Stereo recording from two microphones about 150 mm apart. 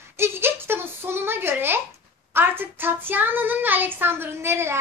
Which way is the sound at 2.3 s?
15° right (ahead or behind).